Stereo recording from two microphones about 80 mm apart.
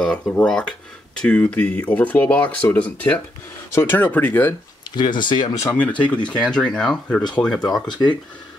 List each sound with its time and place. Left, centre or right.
0.4 s speech: centre
4.9 s speech: left
5.7 s speech: centre